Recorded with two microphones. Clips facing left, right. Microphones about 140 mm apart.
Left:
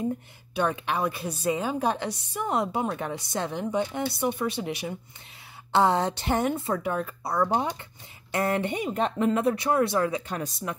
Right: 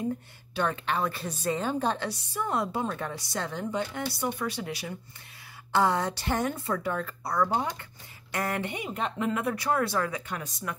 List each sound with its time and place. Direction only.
0.6 s a woman's voice: 15° left (ahead or behind)
10.2 s speech: 35° left (ahead or behind)